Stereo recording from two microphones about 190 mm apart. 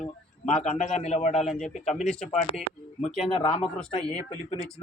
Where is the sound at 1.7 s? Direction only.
35° left (ahead or behind).